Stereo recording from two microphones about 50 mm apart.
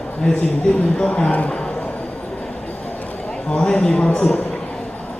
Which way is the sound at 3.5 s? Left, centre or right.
Centre.